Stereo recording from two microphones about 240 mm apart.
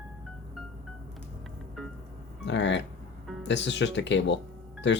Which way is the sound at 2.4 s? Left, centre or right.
Left.